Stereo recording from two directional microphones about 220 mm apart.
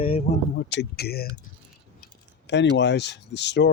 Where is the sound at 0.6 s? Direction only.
45° left (ahead or behind).